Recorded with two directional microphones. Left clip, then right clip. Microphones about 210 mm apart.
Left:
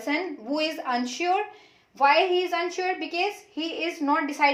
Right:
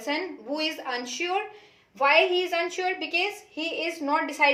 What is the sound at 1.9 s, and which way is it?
A woman's voice, 20° left (ahead or behind).